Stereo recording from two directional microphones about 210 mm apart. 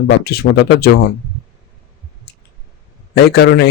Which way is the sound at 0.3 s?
50° left (ahead or behind).